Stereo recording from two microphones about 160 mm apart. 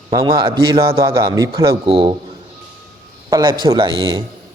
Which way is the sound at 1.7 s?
35° right (ahead or behind).